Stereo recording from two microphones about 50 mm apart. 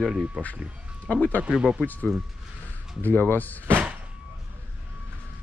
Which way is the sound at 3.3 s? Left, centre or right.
Left.